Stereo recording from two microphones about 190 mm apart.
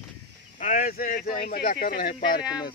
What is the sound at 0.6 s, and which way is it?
Speech, 45° left (ahead or behind).